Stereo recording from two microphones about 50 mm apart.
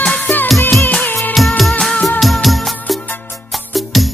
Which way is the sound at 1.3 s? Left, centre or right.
Centre.